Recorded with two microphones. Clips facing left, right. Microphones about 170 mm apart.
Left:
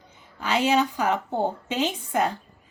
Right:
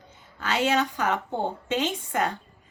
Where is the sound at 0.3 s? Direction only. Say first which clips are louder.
Left 2 dB; 10° left (ahead or behind).